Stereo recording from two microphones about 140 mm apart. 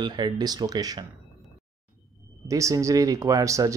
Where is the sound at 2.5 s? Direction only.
25° right (ahead or behind).